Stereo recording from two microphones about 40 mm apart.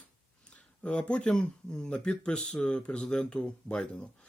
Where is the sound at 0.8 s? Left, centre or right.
Left.